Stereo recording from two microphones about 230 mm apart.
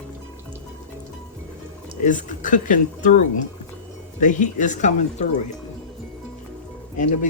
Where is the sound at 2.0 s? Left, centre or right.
Left.